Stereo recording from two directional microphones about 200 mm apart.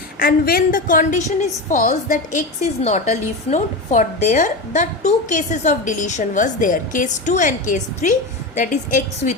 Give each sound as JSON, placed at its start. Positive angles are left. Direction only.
{"t": 0.2, "sound": "a woman's voice", "side_deg": 50}